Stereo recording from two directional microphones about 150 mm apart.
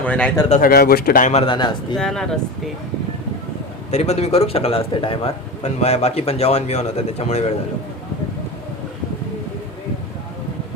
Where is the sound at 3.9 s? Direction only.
45° left (ahead or behind).